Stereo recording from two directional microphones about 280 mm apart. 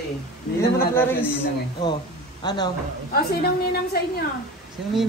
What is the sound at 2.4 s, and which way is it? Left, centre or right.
Speech, centre.